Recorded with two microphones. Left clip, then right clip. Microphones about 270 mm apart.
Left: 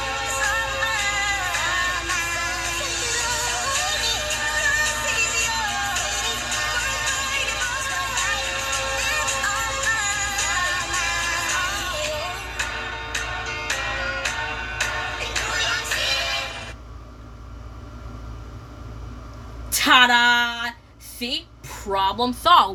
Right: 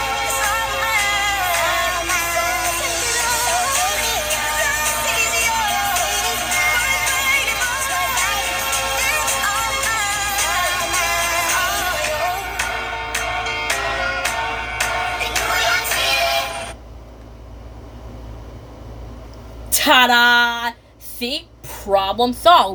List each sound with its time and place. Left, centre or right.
0.0 s music: right
19.7 s music: centre
21.9 s speech: centre